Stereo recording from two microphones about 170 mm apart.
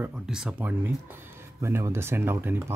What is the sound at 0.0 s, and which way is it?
Speech, 5° right (ahead or behind).